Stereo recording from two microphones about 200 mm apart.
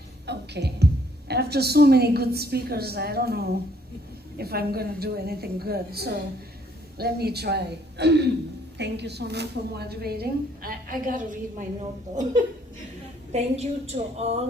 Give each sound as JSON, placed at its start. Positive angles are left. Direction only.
{"t": 0.3, "sound": "music", "side_deg": -55}
{"t": 1.3, "sound": "a woman's voice", "side_deg": -55}
{"t": 13.3, "sound": "a woman's voice", "side_deg": -35}